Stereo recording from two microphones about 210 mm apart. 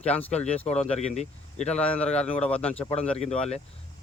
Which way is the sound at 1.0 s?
30° left (ahead or behind).